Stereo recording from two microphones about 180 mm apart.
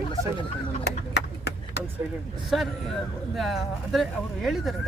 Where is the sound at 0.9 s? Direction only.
65° left (ahead or behind).